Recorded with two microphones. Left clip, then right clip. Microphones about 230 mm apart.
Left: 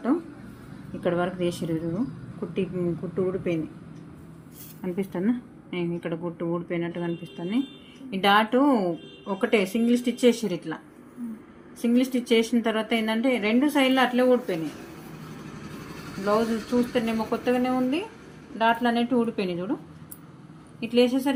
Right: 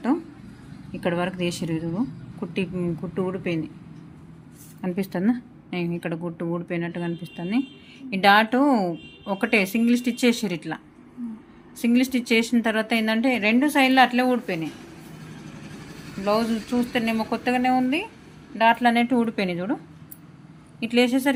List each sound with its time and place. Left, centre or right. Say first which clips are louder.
1.0 s speech: even; right
4.8 s speech: right 2 dB; right
11.8 s speech: right 2 dB; right
16.2 s speech: right 1 dB; right
20.7 s speech: right 1 dB; right